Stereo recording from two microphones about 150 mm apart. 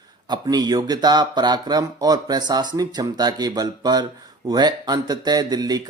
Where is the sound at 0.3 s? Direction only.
25° right (ahead or behind).